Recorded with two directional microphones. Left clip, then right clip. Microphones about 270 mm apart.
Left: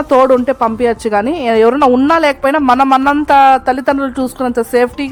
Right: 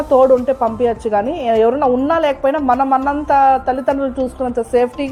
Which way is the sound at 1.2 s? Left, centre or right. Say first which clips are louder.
Left 4 dB; left.